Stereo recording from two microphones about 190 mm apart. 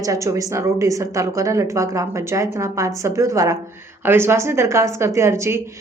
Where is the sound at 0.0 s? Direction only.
15° right (ahead or behind).